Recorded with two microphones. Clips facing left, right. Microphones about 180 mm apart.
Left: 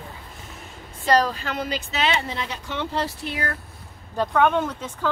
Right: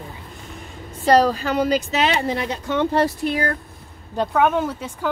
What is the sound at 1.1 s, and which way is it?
Speech, 40° right (ahead or behind).